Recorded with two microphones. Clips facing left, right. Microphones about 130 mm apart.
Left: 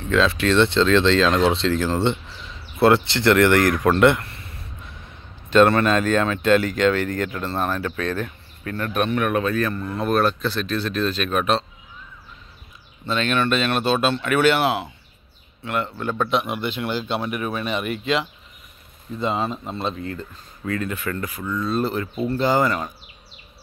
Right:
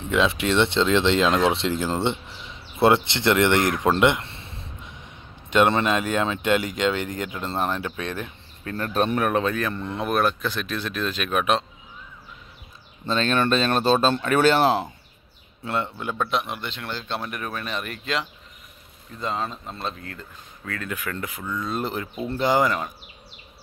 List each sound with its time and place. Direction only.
0.1 s speech: 20° right (ahead or behind)
8.7 s speech: 30° right (ahead or behind); by 11.6 s 10° right (ahead or behind)
13.1 s speech: 35° right (ahead or behind)
15.6 s speech: 25° right (ahead or behind)
16.0 s speech: 10° right (ahead or behind)
16.3 s speech: 5° left (ahead or behind)
21.5 s speech: 15° right (ahead or behind)